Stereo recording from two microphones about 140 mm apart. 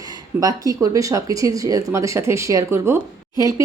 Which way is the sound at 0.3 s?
25° right (ahead or behind).